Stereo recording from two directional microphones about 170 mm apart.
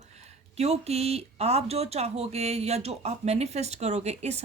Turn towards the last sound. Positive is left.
turn(degrees=-40)  # may be behind; listen again after turning